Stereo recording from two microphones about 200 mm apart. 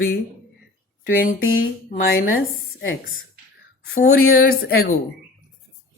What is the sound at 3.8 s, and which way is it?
Speech, 50° left (ahead or behind).